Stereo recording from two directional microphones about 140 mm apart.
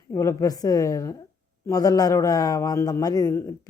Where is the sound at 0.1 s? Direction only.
25° left (ahead or behind).